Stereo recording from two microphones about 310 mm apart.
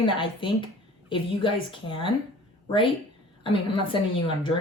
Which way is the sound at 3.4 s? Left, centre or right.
Centre.